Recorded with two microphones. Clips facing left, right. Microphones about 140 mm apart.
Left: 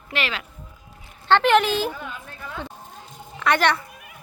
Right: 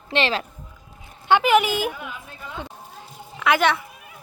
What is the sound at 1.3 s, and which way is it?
A woman's voice, 10° right (ahead or behind).